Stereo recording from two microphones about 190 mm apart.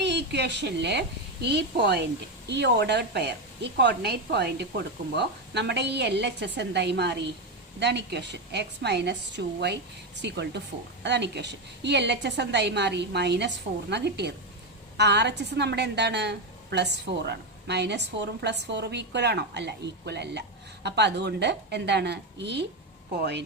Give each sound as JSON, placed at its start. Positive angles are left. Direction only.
{"t": 0.0, "sound": "a woman's voice", "side_deg": -65}